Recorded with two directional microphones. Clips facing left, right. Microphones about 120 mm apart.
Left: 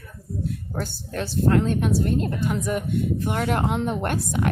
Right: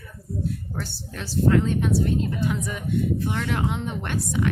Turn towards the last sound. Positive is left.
turn(degrees=55)  # may be behind; listen again after turning